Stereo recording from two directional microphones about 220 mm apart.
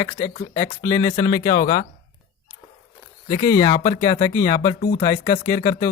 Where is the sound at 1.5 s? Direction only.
40° left (ahead or behind).